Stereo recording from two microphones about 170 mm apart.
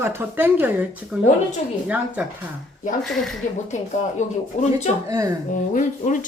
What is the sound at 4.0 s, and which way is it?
Speech, 45° left (ahead or behind).